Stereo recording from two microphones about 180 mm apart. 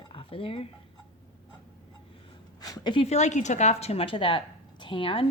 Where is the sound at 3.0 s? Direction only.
40° left (ahead or behind).